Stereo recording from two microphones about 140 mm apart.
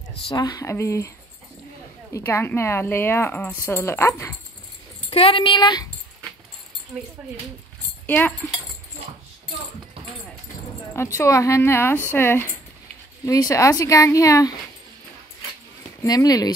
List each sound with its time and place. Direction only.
0.3 s speech: 25° left (ahead or behind)
2.1 s speech: 15° left (ahead or behind)
5.1 s speech: 40° left (ahead or behind)
8.1 s speech: 15° left (ahead or behind)
10.9 s speech: 20° left (ahead or behind)
16.0 s speech: 25° left (ahead or behind)